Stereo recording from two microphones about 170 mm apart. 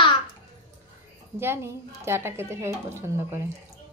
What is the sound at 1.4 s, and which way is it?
A woman's voice, 15° right (ahead or behind).